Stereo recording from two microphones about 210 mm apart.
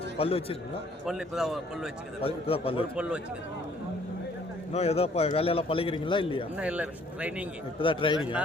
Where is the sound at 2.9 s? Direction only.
5° right (ahead or behind).